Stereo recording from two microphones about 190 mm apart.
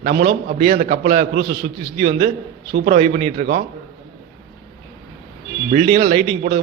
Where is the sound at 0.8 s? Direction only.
50° right (ahead or behind).